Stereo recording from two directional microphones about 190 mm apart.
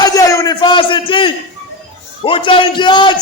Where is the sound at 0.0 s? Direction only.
15° left (ahead or behind).